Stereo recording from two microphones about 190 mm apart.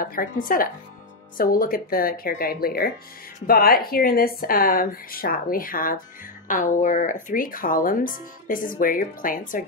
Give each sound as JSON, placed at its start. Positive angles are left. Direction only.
{"t": 0.0, "sound": "speech", "side_deg": 45}